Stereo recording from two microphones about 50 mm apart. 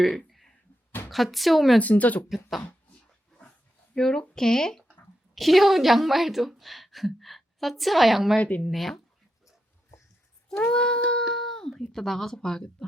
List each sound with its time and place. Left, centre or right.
0.0 s speech: centre
0.3 s a sound: centre
1.1 s a woman's voice: centre
1.8 s speech: left
3.9 s speech: centre
5.3 s a woman's voice: centre
8.4 s speech: left
8.6 s a woman's voice: centre
10.7 s child singing: centre
11.8 s speech: centre